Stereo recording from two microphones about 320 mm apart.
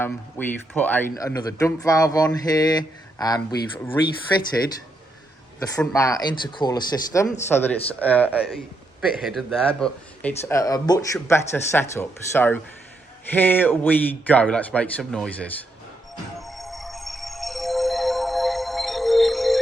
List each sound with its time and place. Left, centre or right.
0.0 s speech: centre
5.5 s a man's voice: centre
16.4 s music: centre